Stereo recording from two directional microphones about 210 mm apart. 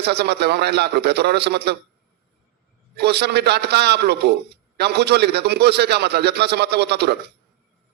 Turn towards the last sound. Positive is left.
turn(degrees=-50)  # may be behind; listen again after turning